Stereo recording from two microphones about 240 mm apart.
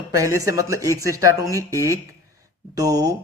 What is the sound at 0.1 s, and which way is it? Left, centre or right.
Speech, centre.